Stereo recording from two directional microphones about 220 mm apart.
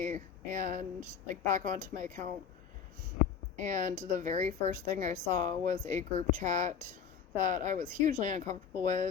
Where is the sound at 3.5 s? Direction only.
35° right (ahead or behind).